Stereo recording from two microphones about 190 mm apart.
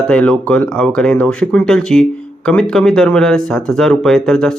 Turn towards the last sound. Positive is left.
turn(degrees=0)  # may be behind; listen again after turning